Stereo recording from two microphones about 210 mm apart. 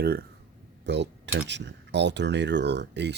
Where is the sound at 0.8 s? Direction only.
55° right (ahead or behind).